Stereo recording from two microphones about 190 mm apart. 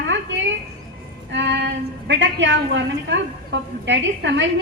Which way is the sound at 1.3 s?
70° right (ahead or behind).